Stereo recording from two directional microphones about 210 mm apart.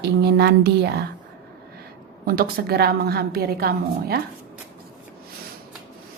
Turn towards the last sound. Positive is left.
turn(degrees=-45)  # may be behind; listen again after turning